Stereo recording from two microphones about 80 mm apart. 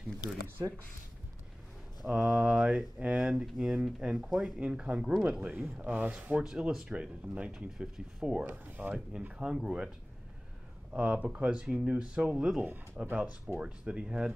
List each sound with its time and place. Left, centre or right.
2.0 s speech: centre
4.6 s speech: centre
5.5 s speech: right
6.4 s speech: centre
10.9 s speech: centre
12.6 s speech: right